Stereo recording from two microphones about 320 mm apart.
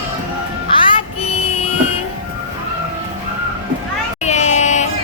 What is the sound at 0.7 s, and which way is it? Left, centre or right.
Child singing, centre.